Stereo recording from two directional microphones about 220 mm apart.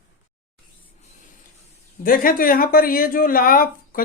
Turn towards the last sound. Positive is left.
turn(degrees=40)  # may be behind; listen again after turning